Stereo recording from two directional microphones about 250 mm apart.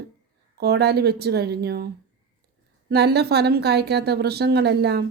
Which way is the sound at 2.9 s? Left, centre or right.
Right.